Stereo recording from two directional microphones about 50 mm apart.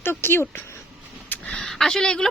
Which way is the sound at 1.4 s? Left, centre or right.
Centre.